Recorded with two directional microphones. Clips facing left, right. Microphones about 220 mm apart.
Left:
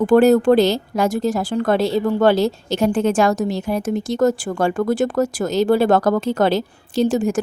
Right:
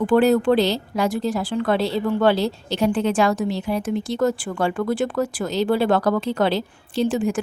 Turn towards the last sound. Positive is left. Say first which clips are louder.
# left 3 dB
turn(degrees=45)  # may be behind; listen again after turning